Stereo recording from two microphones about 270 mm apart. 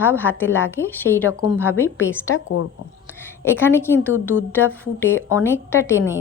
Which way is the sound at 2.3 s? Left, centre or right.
Left.